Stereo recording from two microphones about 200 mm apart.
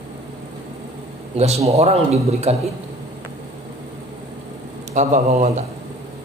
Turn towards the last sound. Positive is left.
turn(degrees=-35)  # may be behind; listen again after turning